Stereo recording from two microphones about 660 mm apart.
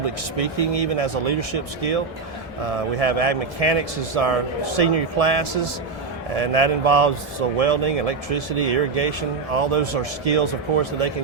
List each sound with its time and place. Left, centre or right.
0.0 s speech: right